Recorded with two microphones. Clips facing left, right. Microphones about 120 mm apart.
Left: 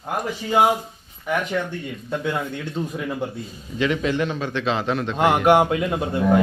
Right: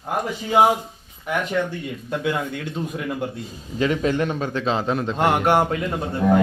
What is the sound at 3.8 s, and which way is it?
A man's voice, 40° right (ahead or behind).